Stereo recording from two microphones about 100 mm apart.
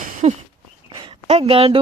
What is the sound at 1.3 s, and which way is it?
Speech, 70° right (ahead or behind).